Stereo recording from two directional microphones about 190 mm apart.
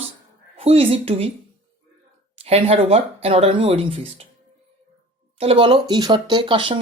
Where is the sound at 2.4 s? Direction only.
30° right (ahead or behind).